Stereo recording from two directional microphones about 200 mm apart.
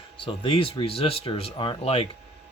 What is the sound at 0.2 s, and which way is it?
Speech, 25° left (ahead or behind).